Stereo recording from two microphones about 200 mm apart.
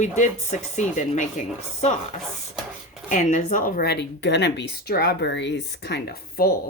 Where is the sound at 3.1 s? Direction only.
40° left (ahead or behind).